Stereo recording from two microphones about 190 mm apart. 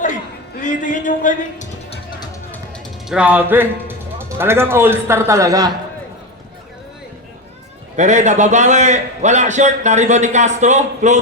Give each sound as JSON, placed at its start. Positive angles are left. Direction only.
{"t": 0.6, "sound": "a man's voice", "side_deg": 40}
{"t": 3.1, "sound": "speech", "side_deg": -5}
{"t": 7.9, "sound": "a man's voice", "side_deg": -40}